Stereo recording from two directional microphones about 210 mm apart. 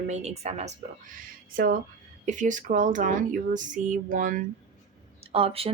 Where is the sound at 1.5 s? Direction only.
45° right (ahead or behind).